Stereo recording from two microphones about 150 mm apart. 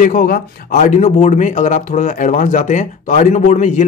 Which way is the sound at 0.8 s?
50° left (ahead or behind).